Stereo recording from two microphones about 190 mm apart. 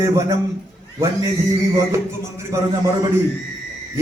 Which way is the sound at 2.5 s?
15° right (ahead or behind).